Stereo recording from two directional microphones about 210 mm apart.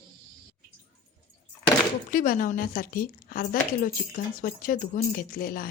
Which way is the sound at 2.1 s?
40° left (ahead or behind).